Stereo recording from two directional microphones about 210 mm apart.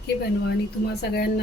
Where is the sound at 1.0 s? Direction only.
50° left (ahead or behind).